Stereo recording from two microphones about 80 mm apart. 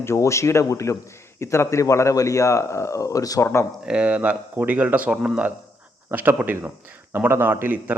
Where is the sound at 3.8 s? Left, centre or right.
Centre.